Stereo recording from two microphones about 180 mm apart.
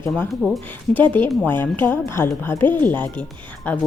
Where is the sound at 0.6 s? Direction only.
10° left (ahead or behind).